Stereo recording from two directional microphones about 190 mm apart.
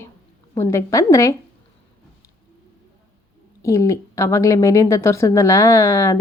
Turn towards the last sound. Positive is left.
turn(degrees=15)  # may be behind; listen again after turning